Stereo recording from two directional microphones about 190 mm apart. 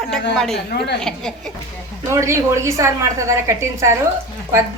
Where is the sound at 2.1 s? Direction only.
15° right (ahead or behind).